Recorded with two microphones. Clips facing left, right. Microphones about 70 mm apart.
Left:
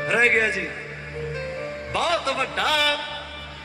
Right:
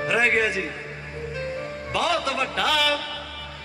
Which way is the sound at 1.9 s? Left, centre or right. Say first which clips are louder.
Even; left.